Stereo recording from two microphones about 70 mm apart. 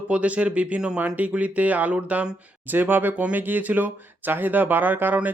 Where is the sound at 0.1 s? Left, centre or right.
Centre.